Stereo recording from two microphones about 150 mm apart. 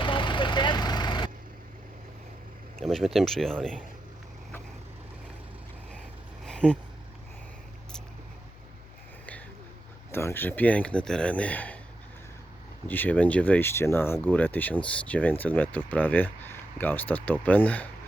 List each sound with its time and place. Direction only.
0.0 s vehicle: 30° left (ahead or behind)
2.7 s speech: centre (ahead or behind)
6.4 s vehicle: 5° left (ahead or behind)
10.1 s speech: 15° left (ahead or behind)
12.9 s speech: 10° left (ahead or behind)